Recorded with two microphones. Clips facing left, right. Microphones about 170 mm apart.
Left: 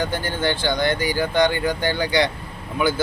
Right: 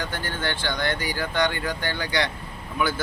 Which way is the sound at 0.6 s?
20° left (ahead or behind).